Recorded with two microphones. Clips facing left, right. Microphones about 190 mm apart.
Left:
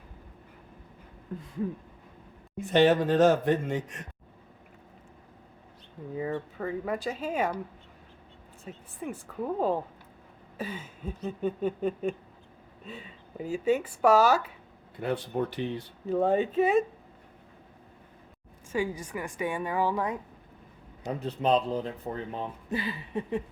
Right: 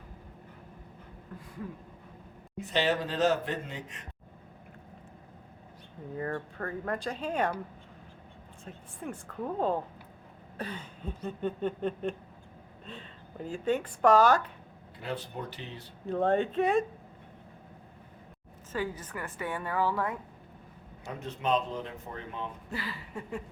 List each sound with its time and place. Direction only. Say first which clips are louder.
2.6 s speech: left 7 dB; 50° left (ahead or behind)
6.1 s a sound: left 3 dB; 10° left (ahead or behind)
8.6 s a sound: left 3 dB; 5° left (ahead or behind)
12.8 s speech: left 3 dB; 5° left (ahead or behind)
14.9 s speech: left 7 dB; 55° left (ahead or behind)
16.0 s a sound: left 2 dB; 5° left (ahead or behind)
18.7 s speech: left 4 dB; 10° left (ahead or behind)
21.1 s speech: left 4 dB; 35° left (ahead or behind)
22.7 s speech: left 6 dB; 20° left (ahead or behind)